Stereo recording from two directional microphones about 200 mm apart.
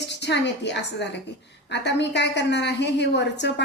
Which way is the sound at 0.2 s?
60° left (ahead or behind).